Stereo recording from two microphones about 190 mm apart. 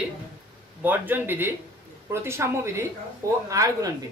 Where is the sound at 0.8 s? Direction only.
10° right (ahead or behind).